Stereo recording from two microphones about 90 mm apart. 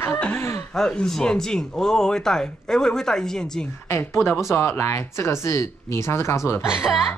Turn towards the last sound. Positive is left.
turn(degrees=-5)  # may be behind; listen again after turning